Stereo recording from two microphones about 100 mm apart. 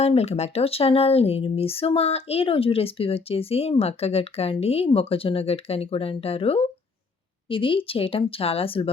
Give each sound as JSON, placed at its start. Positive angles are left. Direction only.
{"t": 0.0, "sound": "speech", "side_deg": 90}
{"t": 4.9, "sound": "speech", "side_deg": 70}
{"t": 7.5, "sound": "speech", "side_deg": 60}